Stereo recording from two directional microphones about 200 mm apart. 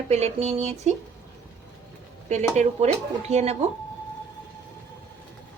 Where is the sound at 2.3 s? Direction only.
35° right (ahead or behind).